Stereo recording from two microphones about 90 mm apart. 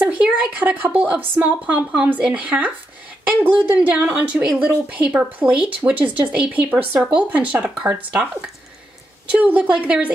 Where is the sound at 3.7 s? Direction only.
15° right (ahead or behind).